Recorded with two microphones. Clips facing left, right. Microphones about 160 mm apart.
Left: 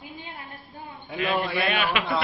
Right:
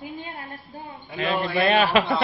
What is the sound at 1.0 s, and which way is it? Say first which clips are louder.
Speech: right 1 dB; 10° left (ahead or behind).